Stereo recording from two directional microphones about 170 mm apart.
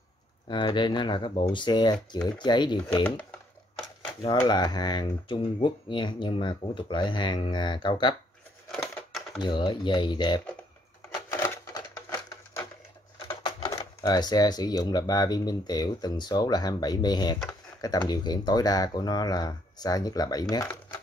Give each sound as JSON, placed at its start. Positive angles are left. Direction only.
{"t": 0.5, "sound": "speech", "side_deg": 25}
{"t": 3.3, "sound": "a sound", "side_deg": 5}
{"t": 4.4, "sound": "speech", "side_deg": 25}
{"t": 8.7, "sound": "typewriter", "side_deg": 0}
{"t": 9.4, "sound": "speech", "side_deg": 30}
{"t": 11.3, "sound": "a sound", "side_deg": 15}
{"t": 13.3, "sound": "speech", "side_deg": 20}